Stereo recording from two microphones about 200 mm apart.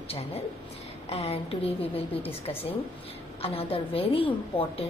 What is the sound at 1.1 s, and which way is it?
Speech, 30° left (ahead or behind).